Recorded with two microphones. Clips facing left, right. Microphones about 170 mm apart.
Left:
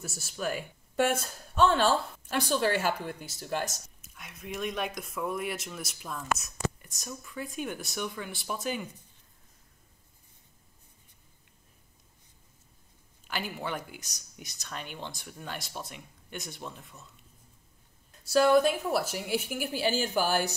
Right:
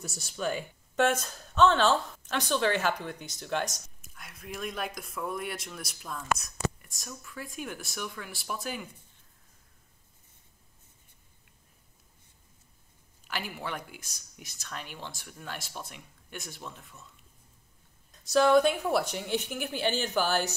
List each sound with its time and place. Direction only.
0.0 s speech: 5° left (ahead or behind)
13.3 s speech: centre (ahead or behind)
18.2 s speech: 5° left (ahead or behind)